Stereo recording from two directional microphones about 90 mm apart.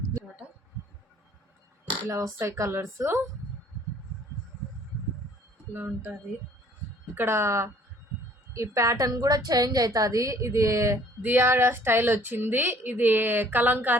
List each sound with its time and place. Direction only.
0.2 s a sound: 25° right (ahead or behind)
2.0 s a woman's voice: 35° right (ahead or behind)
5.7 s a woman's voice: 20° right (ahead or behind)
7.2 s a woman's voice: 30° right (ahead or behind)